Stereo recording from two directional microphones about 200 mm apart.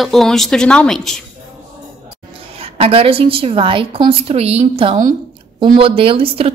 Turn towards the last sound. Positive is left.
turn(degrees=-30)  # may be behind; listen again after turning